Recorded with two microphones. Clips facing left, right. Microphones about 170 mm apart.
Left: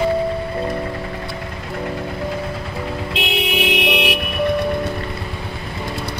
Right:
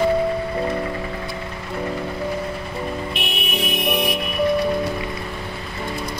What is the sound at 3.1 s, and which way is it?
Vehicle, 90° left.